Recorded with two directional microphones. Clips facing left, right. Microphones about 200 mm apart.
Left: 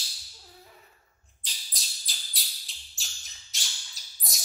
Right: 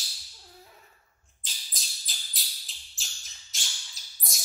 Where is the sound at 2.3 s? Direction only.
Centre (ahead or behind).